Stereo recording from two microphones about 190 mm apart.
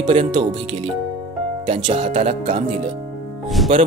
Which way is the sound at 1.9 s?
40° right (ahead or behind).